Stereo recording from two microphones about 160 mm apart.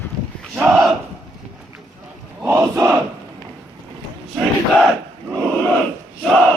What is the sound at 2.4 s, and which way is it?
Crowd, 15° right (ahead or behind).